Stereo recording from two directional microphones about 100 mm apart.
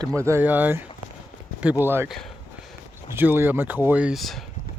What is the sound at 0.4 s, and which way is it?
Speech, 20° right (ahead or behind).